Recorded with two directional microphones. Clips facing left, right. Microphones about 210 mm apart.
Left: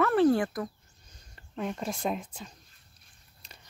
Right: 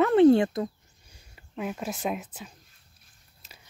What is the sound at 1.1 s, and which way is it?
Speech, 10° right (ahead or behind).